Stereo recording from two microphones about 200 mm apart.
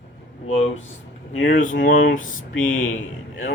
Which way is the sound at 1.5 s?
40° left (ahead or behind).